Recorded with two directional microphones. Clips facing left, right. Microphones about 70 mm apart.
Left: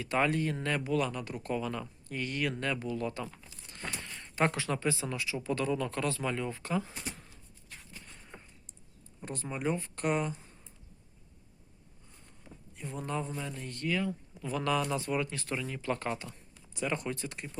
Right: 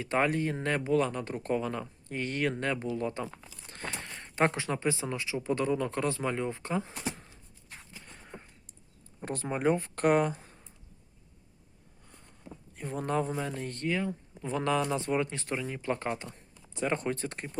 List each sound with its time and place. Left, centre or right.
0.0 s speech: right
2.9 s crumpling: right
4.2 s speech: right
9.2 s speech: right
12.7 s speech: right